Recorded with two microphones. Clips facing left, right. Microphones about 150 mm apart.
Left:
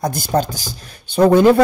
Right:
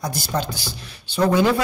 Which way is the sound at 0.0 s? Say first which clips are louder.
Left 7 dB; 50° left (ahead or behind).